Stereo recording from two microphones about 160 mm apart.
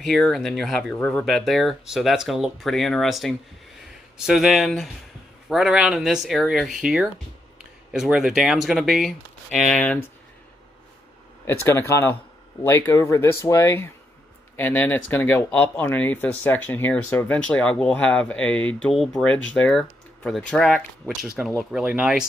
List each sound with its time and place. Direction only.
0.0 s speech: centre (ahead or behind)
11.4 s speech: 15° left (ahead or behind); by 22.2 s 5° right (ahead or behind)